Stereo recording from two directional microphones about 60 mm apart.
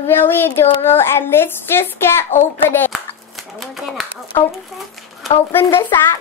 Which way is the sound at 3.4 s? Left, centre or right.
Centre.